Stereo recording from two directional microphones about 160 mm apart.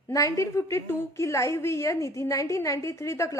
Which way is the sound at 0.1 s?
20° left (ahead or behind).